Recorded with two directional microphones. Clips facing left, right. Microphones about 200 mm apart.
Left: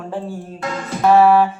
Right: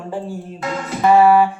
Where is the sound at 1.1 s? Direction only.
10° right (ahead or behind).